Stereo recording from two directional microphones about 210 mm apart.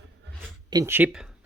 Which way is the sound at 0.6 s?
15° right (ahead or behind).